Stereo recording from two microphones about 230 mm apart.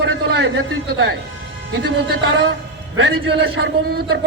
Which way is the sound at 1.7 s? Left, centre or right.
Right.